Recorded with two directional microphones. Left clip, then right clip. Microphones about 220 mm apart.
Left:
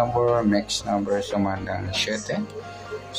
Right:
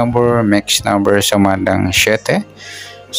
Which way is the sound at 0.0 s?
35° right (ahead or behind).